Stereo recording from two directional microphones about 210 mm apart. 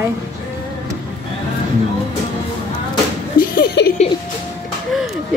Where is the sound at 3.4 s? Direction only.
45° left (ahead or behind).